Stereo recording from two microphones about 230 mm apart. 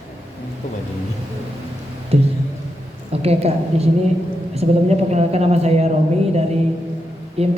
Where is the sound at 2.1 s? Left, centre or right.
Right.